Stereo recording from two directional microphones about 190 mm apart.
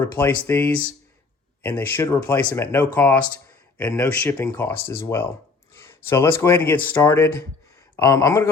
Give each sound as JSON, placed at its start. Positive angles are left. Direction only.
{"t": 0.0, "sound": "speech", "side_deg": 10}
{"t": 1.8, "sound": "speech", "side_deg": 10}